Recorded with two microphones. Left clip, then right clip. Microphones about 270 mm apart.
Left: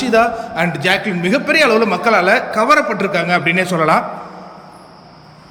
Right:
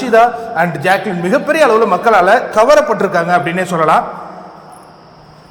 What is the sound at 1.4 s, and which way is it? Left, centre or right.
A man's voice, centre.